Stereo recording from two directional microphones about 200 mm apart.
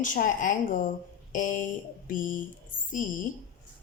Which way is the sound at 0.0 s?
40° left (ahead or behind).